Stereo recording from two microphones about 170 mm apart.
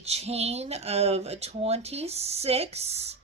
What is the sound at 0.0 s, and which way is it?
Speech, 40° right (ahead or behind).